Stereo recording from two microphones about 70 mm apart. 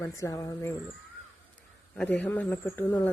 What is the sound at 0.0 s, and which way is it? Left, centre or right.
Speech, left.